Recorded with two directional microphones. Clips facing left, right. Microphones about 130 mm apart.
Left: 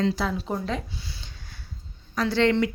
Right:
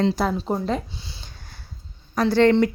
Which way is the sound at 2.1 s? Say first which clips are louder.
Right 5 dB; 45° right (ahead or behind).